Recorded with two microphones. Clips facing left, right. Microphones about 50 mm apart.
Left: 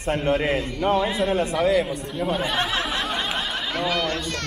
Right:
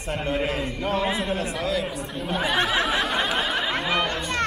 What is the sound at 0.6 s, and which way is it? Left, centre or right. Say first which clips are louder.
Speech: left 4 dB; centre.